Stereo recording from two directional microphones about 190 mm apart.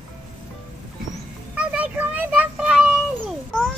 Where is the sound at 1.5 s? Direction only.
5° right (ahead or behind).